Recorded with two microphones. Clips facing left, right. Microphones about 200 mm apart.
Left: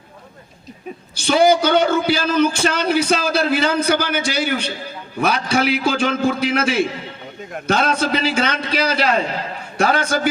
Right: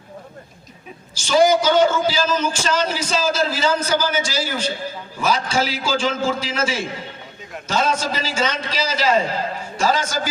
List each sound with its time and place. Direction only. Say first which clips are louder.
1.1 s a man's voice: left 1 dB; 60° left (ahead or behind)